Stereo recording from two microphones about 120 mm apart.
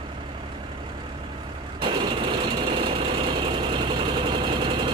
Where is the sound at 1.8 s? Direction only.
40° right (ahead or behind).